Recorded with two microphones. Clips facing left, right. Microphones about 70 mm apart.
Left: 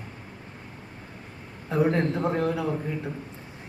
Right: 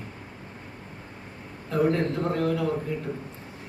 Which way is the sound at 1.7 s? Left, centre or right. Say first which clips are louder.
Even; centre.